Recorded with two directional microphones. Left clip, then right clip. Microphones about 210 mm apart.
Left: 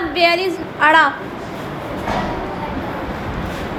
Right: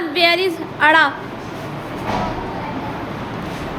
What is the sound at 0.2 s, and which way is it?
Speech, 10° right (ahead or behind).